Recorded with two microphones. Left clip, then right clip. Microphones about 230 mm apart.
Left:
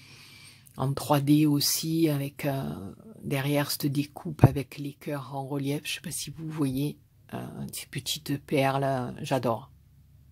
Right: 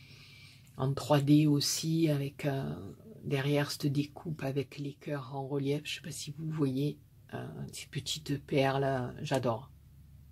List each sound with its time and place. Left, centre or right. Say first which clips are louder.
0.1 s speech: left 4 dB; left